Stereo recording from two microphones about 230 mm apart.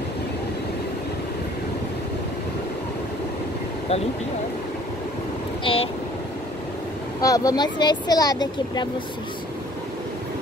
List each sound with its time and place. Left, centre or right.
5.6 s speech: left
7.2 s speech: centre